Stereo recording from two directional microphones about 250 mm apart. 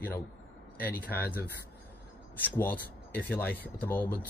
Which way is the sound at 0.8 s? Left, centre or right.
Centre.